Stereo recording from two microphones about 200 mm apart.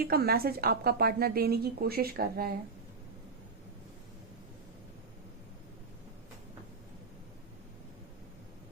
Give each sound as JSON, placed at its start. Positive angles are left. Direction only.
{"t": 0.0, "sound": "a woman's voice", "side_deg": -50}